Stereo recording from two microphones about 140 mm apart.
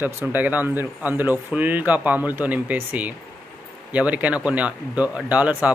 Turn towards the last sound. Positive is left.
turn(degrees=-10)  # may be behind; listen again after turning